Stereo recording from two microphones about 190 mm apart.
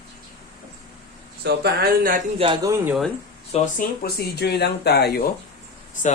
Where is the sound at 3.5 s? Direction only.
45° left (ahead or behind).